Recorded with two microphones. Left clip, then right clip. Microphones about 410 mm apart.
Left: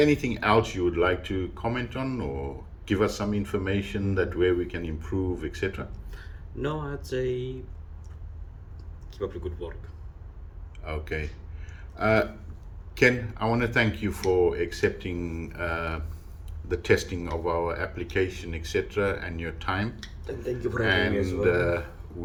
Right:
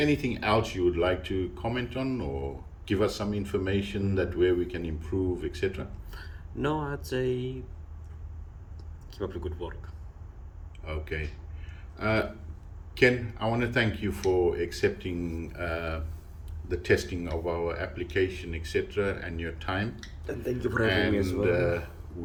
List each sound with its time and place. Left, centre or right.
0.0 s speech: centre
7.1 s speech: centre
9.1 s speech: centre
10.8 s speech: centre
20.2 s speech: centre
20.8 s speech: centre